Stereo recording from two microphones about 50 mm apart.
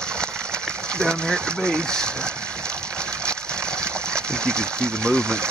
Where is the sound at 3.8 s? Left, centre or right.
Centre.